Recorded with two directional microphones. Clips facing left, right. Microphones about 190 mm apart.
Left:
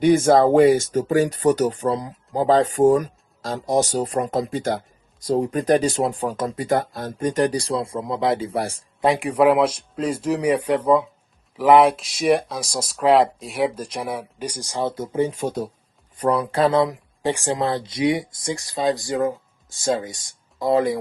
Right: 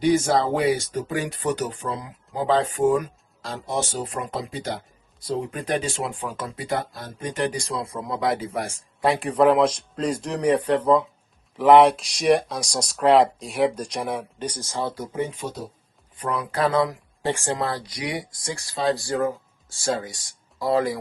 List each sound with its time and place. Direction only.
0.0 s speech: 50° left (ahead or behind); by 8.8 s 35° left (ahead or behind)
9.0 s a man's voice: 15° left (ahead or behind); by 15.7 s 55° left (ahead or behind)
16.1 s speech: 35° left (ahead or behind)